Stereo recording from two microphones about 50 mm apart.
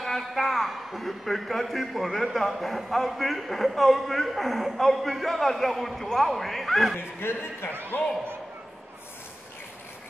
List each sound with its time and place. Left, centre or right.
0.0 s a man's voice: centre
7.0 s a man's voice: left